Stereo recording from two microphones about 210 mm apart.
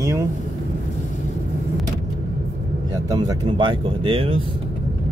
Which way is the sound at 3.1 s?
20° right (ahead or behind).